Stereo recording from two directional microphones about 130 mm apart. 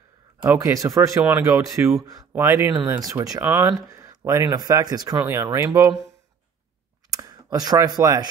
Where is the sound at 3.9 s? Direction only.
25° right (ahead or behind).